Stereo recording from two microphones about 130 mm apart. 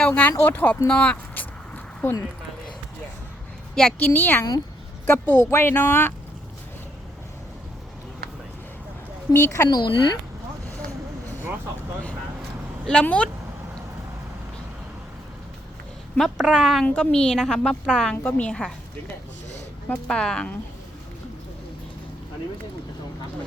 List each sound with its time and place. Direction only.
0.0 s vehicle: 15° left (ahead or behind)
3.8 s speech: 10° left (ahead or behind)
9.3 s speech: 20° left (ahead or behind)
9.6 s speech: 35° left (ahead or behind)
12.8 s speech: 5° left (ahead or behind)
16.1 s a woman's voice: centre (ahead or behind)
19.9 s speech: 5° left (ahead or behind)